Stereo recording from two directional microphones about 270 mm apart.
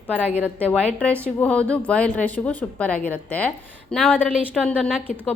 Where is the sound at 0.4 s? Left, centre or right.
Centre.